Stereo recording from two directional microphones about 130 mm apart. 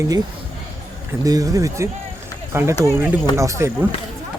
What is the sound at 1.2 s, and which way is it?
Speech, 25° right (ahead or behind).